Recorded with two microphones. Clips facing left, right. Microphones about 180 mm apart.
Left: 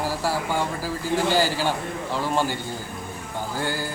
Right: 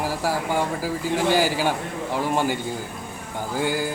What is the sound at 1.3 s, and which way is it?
Speech, 15° right (ahead or behind).